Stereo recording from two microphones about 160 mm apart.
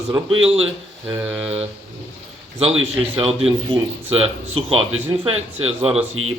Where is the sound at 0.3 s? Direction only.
40° right (ahead or behind).